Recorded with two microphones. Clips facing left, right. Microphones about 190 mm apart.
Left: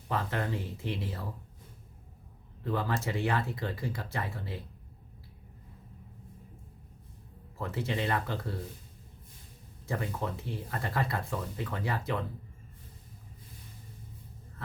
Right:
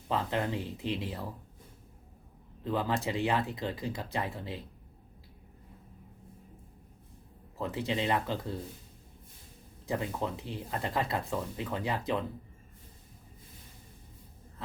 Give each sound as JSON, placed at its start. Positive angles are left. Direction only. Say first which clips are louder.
{"t": 0.1, "sound": "speech", "louder": "right 2 dB", "side_deg": -15}
{"t": 2.6, "sound": "speech", "louder": "right 1 dB", "side_deg": -15}
{"t": 7.6, "sound": "speech", "louder": "right 1 dB", "side_deg": -15}
{"t": 9.8, "sound": "speech", "louder": "right 1 dB", "side_deg": -20}